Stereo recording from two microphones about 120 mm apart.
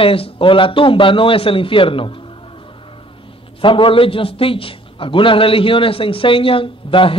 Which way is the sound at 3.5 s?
45° left (ahead or behind).